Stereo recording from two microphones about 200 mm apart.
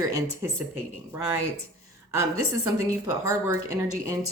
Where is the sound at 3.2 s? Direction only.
15° right (ahead or behind).